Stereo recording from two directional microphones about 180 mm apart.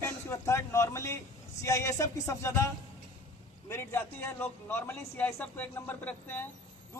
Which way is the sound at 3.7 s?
15° left (ahead or behind).